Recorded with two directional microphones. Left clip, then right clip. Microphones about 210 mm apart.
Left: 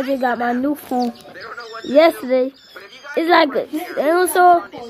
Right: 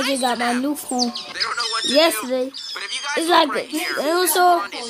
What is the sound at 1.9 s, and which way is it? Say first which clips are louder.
A woman's voice: left 6 dB; centre (ahead or behind).